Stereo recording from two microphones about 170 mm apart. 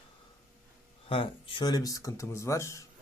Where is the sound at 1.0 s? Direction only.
30° left (ahead or behind); by 2.8 s 15° left (ahead or behind).